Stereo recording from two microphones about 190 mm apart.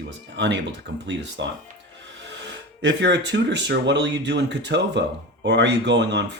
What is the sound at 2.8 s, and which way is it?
Speech, 65° right (ahead or behind).